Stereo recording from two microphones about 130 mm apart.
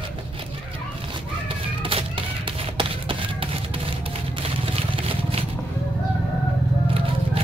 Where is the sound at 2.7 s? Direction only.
40° right (ahead or behind).